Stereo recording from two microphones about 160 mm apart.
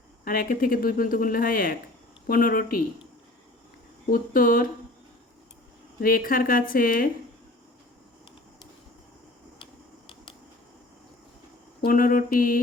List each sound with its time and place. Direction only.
0.3 s speech: 60° left (ahead or behind)
4.1 s speech: 60° left (ahead or behind)
6.0 s speech: 65° left (ahead or behind)
11.9 s speech: 60° left (ahead or behind)